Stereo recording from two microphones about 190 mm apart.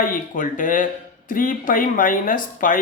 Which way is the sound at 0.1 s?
45° left (ahead or behind).